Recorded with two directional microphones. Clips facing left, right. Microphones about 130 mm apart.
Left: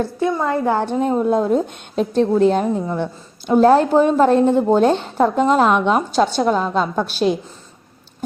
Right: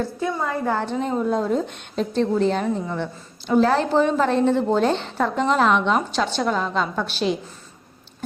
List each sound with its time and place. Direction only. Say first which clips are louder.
0.4 s a woman's voice: left 4 dB; 30° left (ahead or behind)
0.8 s a woman's voice: left 5 dB; 50° left (ahead or behind)